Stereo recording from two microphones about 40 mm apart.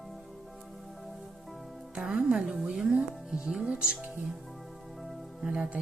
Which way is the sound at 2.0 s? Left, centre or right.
Centre.